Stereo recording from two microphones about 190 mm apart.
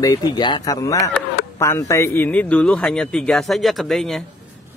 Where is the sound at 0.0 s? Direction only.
20° left (ahead or behind).